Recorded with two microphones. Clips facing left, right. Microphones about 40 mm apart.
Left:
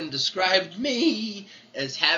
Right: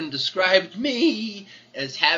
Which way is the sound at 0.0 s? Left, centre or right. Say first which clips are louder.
Right 3 dB; right.